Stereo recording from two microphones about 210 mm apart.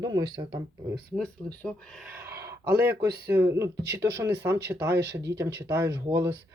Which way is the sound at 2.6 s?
45° right (ahead or behind).